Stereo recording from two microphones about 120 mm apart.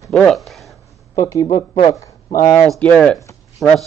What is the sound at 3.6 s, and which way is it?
Speech, centre (ahead or behind).